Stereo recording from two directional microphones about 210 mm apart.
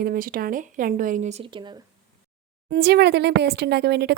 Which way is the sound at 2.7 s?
50° right (ahead or behind).